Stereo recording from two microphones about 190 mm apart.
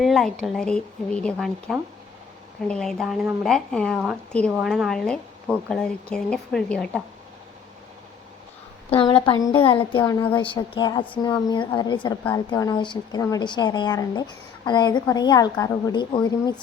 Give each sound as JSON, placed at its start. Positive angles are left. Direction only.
{"t": 0.0, "sound": "speech", "side_deg": 0}
{"t": 8.9, "sound": "a woman's voice", "side_deg": 30}